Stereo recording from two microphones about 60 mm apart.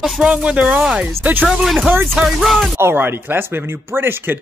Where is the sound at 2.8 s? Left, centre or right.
Right.